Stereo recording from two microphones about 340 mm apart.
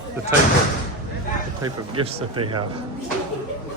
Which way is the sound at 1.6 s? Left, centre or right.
Centre.